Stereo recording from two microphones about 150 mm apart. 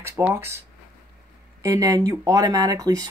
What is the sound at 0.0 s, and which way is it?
Speech, 15° right (ahead or behind).